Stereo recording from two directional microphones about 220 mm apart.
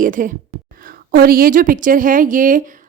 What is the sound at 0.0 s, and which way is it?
A woman's voice, 35° right (ahead or behind).